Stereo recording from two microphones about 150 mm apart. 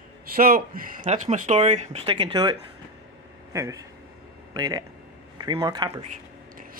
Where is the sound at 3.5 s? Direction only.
20° right (ahead or behind).